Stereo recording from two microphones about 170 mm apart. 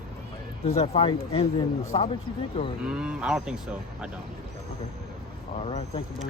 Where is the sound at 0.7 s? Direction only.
35° left (ahead or behind).